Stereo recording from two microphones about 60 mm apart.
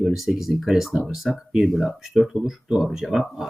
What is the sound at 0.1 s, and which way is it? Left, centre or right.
Speech, centre.